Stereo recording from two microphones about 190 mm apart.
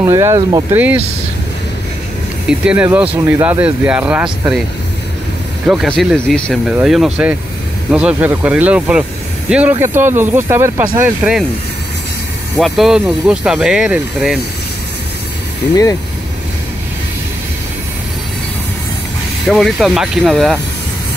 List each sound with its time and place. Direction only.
0.0 s speech: 15° right (ahead or behind)
0.7 s speech: 10° right (ahead or behind)
2.4 s speech: 5° right (ahead or behind)
5.7 s speech: centre (ahead or behind)
12.5 s speech: centre (ahead or behind)
15.7 s speech: 20° left (ahead or behind)
19.4 s speech: centre (ahead or behind)